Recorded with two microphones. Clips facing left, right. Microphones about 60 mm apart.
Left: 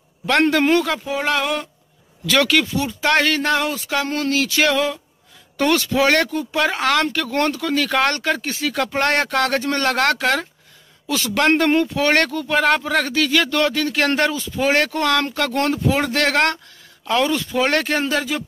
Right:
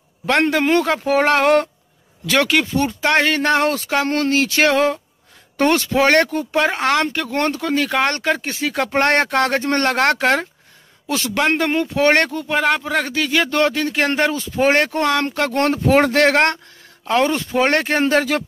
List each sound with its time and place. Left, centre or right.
0.4 s a man's voice: centre
0.7 s speech: right
1.0 s speech: right
2.2 s speech: right
2.8 s speech: right
3.1 s speech: right
3.3 s a man's voice: right
11.3 s speech: centre
11.8 s speech: right
12.5 s a man's voice: centre
12.8 s speech: centre
14.3 s speech: right